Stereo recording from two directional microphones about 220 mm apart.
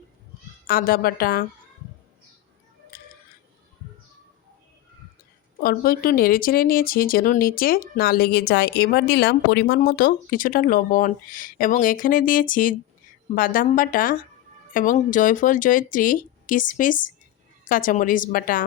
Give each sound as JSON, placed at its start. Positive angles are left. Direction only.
{"t": 0.7, "sound": "a woman's voice", "side_deg": 40}
{"t": 5.6, "sound": "speech", "side_deg": 40}